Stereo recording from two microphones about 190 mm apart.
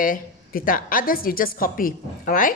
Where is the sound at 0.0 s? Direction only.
45° left (ahead or behind).